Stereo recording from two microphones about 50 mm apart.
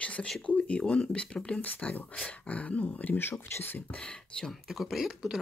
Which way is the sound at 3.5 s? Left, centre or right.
Left.